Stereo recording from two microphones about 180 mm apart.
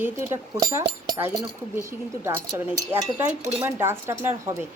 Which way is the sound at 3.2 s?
10° right (ahead or behind).